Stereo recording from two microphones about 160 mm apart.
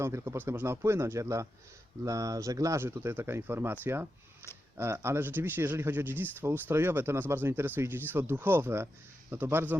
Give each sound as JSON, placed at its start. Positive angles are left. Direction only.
{"t": 0.0, "sound": "speech", "side_deg": -15}